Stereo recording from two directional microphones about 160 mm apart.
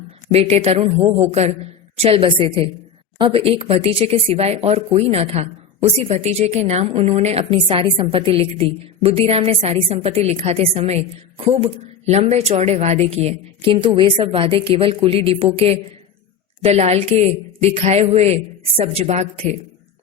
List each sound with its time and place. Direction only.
0.3 s speech: 40° right (ahead or behind)